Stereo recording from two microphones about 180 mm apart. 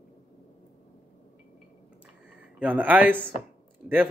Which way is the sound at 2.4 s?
10° right (ahead or behind).